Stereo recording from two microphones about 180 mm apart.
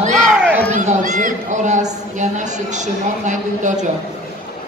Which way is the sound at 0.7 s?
40° right (ahead or behind).